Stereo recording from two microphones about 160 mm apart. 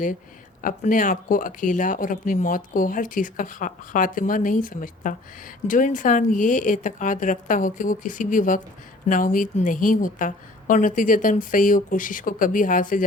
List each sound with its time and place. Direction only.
0.6 s speech: 55° left (ahead or behind)